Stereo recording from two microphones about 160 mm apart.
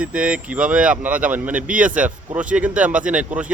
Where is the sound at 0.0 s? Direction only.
5° right (ahead or behind).